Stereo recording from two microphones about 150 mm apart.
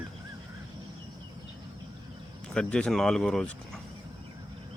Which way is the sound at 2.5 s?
5° left (ahead or behind).